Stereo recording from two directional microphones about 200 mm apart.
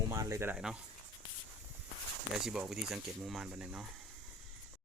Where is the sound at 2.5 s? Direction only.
5° right (ahead or behind).